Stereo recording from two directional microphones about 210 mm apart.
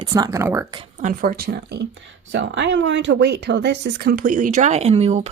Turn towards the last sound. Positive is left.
turn(degrees=-30)  # may be behind; listen again after turning